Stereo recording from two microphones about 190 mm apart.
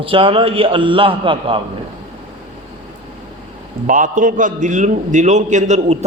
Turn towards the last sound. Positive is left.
turn(degrees=-35)  # may be behind; listen again after turning